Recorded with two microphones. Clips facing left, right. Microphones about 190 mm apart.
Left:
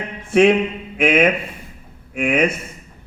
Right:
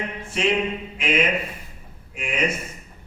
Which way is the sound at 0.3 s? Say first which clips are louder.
Left 10 dB; 55° left (ahead or behind).